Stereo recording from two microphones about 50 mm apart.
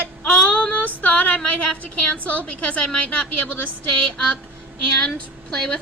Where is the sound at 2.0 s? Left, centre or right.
Left.